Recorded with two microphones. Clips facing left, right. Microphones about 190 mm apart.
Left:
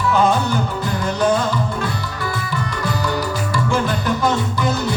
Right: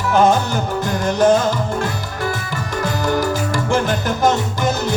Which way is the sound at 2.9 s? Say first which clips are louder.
Right 4 dB; 45° right (ahead or behind).